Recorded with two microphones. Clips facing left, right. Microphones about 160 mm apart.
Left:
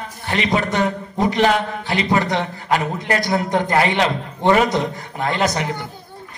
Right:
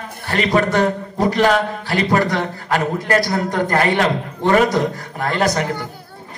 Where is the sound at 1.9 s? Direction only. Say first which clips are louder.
Right 2 dB; 45° right (ahead or behind).